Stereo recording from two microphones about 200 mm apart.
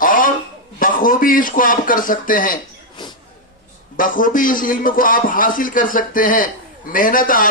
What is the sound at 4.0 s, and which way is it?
A man's voice, 45° left (ahead or behind).